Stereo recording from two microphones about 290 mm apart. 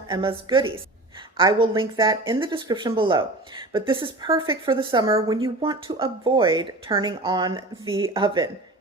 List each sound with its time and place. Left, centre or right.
0.1 s speech: centre